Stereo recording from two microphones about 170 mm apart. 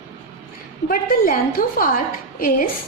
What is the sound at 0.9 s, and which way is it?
A woman's voice, 55° left (ahead or behind).